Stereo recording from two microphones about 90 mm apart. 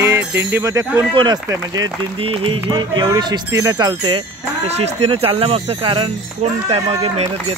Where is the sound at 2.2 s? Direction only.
90° right; by 3.0 s 60° right (ahead or behind).